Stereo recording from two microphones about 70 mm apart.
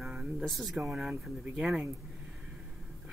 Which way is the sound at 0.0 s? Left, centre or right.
Centre.